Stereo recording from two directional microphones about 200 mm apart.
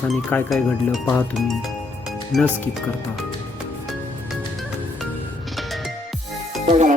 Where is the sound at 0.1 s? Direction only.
5° left (ahead or behind).